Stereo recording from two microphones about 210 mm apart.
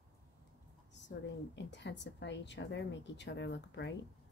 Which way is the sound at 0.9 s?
55° left (ahead or behind).